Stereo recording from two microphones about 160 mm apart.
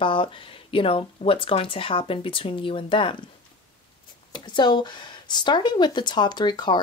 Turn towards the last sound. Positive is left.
turn(degrees=25)  # may be behind; listen again after turning